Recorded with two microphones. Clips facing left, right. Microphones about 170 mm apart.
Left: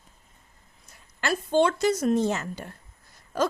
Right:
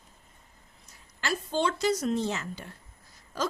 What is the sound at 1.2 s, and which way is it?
A woman's voice, 55° left (ahead or behind).